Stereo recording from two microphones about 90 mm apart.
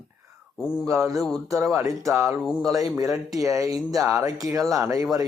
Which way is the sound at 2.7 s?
40° right (ahead or behind).